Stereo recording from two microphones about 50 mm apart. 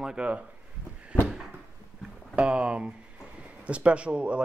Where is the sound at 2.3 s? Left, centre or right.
Right.